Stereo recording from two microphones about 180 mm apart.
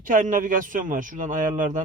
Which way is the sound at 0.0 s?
45° right (ahead or behind).